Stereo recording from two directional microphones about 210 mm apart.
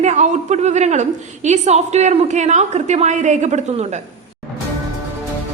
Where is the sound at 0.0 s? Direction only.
35° right (ahead or behind).